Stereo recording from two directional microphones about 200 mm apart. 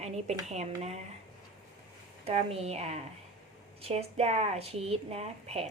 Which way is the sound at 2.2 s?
30° right (ahead or behind).